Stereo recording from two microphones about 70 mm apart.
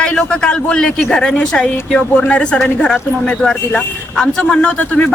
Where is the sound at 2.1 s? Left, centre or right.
Left.